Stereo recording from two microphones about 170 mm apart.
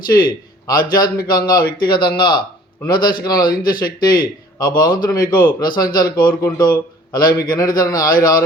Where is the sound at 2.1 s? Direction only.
25° left (ahead or behind).